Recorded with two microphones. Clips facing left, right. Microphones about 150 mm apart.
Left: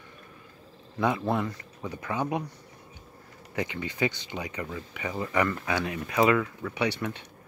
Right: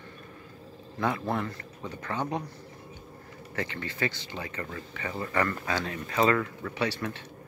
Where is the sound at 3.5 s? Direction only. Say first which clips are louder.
Left 2 dB; 15° left (ahead or behind).